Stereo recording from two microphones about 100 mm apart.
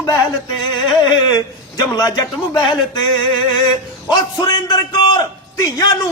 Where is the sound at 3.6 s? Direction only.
40° left (ahead or behind).